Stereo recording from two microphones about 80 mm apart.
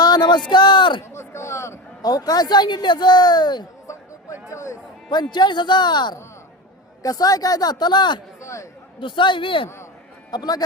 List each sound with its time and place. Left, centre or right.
0.0 s speech: left
1.1 s speech: left
2.0 s speech: left
3.8 s a sound: left
5.1 s speech: left
7.0 s speech: left
8.4 s chatter: left
9.0 s a man's voice: left
10.3 s speech: left